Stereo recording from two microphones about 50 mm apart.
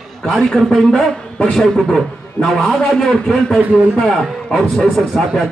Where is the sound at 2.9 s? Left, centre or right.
Centre.